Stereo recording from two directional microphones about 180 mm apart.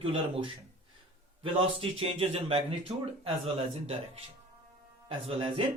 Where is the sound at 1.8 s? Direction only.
35° right (ahead or behind).